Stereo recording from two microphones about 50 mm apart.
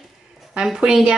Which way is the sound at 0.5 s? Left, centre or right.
Centre.